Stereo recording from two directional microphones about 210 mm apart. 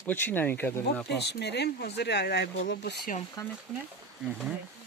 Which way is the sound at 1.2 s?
50° left (ahead or behind).